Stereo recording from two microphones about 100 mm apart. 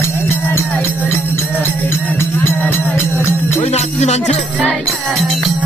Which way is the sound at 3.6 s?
90° left.